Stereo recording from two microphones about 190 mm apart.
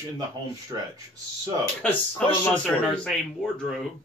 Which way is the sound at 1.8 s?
5° left (ahead or behind).